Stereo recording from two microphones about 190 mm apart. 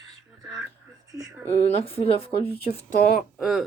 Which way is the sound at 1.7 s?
30° left (ahead or behind).